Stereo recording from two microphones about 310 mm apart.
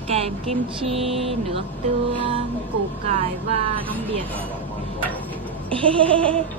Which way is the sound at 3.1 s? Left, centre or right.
Centre.